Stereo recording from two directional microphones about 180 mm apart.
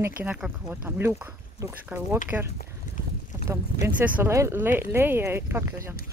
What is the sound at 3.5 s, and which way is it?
Speech, 10° right (ahead or behind).